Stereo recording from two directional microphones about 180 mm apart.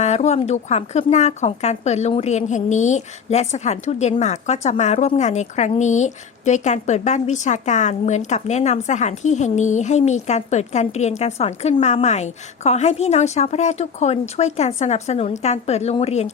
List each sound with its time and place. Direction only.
0.0 s speech: 40° left (ahead or behind)